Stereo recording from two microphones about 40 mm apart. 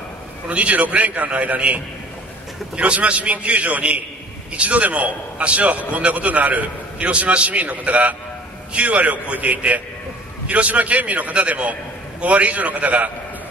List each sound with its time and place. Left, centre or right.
0.5 s a man's voice: right